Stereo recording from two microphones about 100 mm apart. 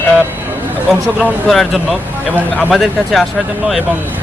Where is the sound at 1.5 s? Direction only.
Centre (ahead or behind).